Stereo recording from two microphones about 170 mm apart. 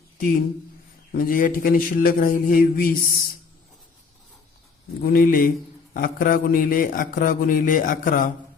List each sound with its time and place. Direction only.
1.1 s a man's voice: 55° left (ahead or behind)
5.0 s a man's voice: 60° left (ahead or behind)